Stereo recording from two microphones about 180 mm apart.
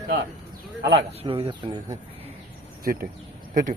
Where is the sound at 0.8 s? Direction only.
85° right.